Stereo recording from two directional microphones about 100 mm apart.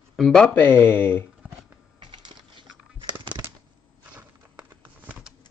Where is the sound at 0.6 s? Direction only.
20° left (ahead or behind).